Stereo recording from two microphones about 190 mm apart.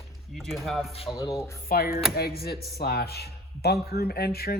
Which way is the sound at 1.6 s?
50° left (ahead or behind).